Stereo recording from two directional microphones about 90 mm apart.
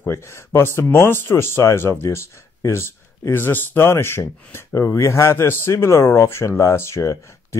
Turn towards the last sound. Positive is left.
turn(degrees=35)  # may be behind; listen again after turning